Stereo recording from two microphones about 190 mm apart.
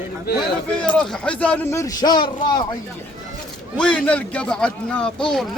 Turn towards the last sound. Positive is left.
turn(degrees=0)  # may be behind; listen again after turning